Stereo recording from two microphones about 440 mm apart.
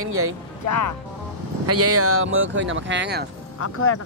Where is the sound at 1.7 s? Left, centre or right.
Right.